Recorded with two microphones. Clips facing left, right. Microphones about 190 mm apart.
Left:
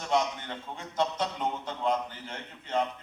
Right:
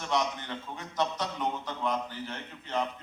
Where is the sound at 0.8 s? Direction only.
25° left (ahead or behind).